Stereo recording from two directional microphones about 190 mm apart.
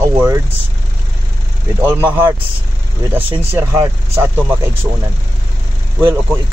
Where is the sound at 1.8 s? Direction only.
10° right (ahead or behind).